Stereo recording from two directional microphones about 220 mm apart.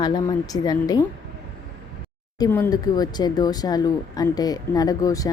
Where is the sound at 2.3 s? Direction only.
15° left (ahead or behind).